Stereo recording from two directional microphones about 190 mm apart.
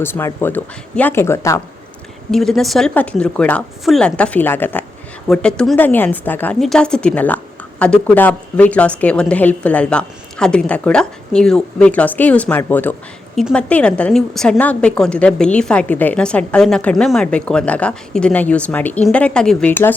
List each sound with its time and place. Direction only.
0.0 s a woman's voice: 10° left (ahead or behind)
2.3 s a woman's voice: centre (ahead or behind)